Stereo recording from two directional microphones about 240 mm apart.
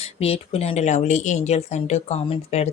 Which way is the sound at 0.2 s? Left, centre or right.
Left.